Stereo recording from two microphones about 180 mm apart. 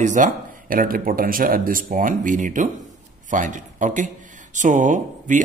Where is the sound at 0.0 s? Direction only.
45° right (ahead or behind).